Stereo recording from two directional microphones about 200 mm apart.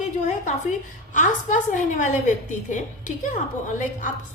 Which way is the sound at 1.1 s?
40° left (ahead or behind).